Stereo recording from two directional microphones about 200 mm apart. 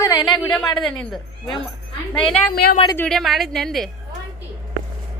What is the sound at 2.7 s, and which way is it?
Speech, 25° left (ahead or behind).